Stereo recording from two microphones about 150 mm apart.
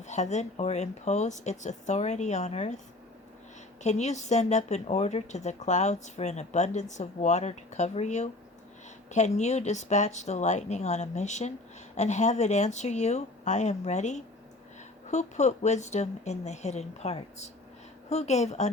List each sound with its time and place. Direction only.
0.0 s speech: 50° left (ahead or behind)
3.8 s speech: 50° left (ahead or behind)